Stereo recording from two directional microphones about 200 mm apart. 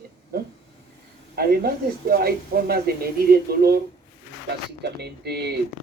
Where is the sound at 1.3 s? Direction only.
50° right (ahead or behind).